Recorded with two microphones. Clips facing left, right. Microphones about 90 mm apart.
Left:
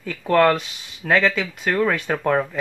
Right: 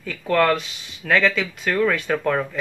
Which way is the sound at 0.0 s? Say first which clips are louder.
Left 3 dB; 25° left (ahead or behind).